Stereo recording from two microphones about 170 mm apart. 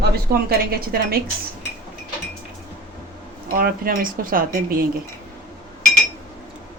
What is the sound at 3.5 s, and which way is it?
Speech, 60° right (ahead or behind).